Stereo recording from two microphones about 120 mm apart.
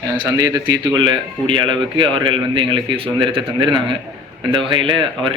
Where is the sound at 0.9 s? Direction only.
40° right (ahead or behind).